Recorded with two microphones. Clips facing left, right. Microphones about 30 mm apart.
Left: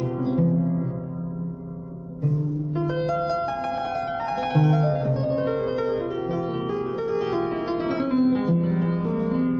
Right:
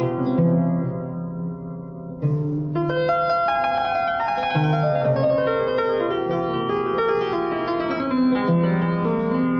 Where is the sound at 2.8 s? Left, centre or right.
Centre.